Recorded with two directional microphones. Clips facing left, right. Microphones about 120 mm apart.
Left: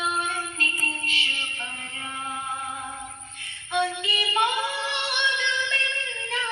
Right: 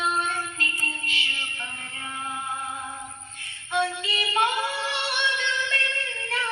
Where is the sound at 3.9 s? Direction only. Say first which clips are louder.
Left 1 dB; 20° left (ahead or behind).